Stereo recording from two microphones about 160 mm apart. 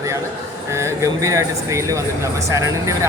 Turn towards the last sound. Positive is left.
turn(degrees=-20)  # may be behind; listen again after turning